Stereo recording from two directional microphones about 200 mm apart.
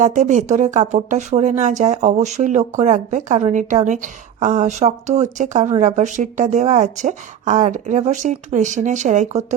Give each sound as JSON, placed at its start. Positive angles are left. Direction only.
{"t": 0.0, "sound": "speech", "side_deg": -35}